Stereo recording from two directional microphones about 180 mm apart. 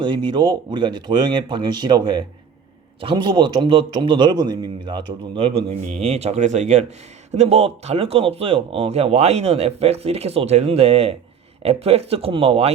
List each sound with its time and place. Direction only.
0.0 s a man's voice: 25° right (ahead or behind)